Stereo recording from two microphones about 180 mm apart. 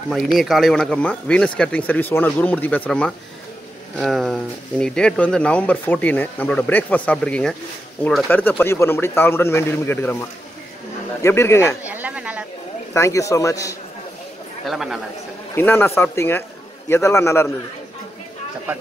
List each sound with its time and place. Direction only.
0.1 s speech: centre (ahead or behind)
11.2 s speech: 15° left (ahead or behind)
11.8 s a sound: 10° right (ahead or behind)
12.9 s speech: 15° left (ahead or behind)
14.7 s a man's voice: centre (ahead or behind)
15.5 s speech: 15° left (ahead or behind)